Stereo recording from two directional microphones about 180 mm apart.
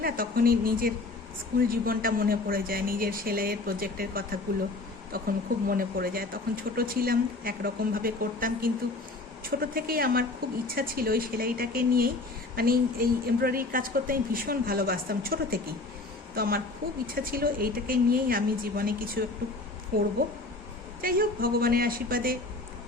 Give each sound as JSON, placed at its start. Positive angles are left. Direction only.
{"t": 0.0, "sound": "a woman's voice", "side_deg": -55}
{"t": 20.2, "sound": "speech", "side_deg": -55}